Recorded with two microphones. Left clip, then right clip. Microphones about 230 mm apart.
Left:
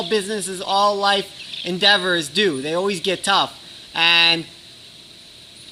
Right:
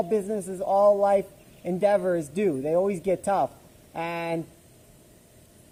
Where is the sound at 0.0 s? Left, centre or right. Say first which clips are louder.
Left 4 dB; left.